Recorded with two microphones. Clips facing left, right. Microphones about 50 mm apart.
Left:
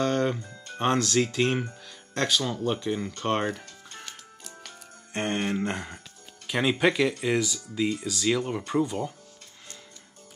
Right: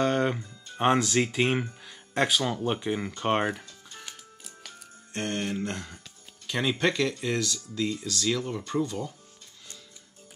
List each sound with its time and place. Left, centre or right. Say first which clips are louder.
0.0 s music: even; centre
0.7 s speech: right 1 dB; centre
4.0 s music: left 2 dB; centre
5.1 s speech: left 3 dB; left
6.4 s speech: left 3 dB; centre